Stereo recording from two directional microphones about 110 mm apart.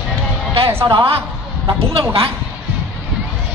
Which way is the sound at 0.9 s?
55° right (ahead or behind).